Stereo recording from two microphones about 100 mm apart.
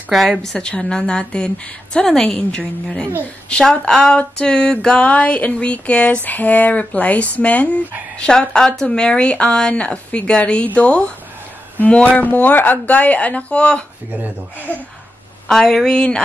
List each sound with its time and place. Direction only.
0.1 s speech: centre (ahead or behind); by 14.8 s 20° left (ahead or behind)
15.4 s speech: 5° left (ahead or behind)